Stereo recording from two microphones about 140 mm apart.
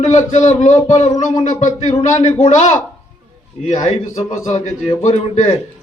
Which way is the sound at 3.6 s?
60° left (ahead or behind).